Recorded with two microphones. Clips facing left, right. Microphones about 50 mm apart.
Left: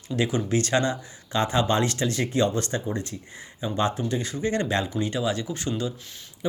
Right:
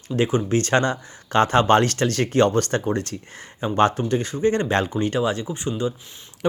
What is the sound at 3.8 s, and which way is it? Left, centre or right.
A man's voice, right.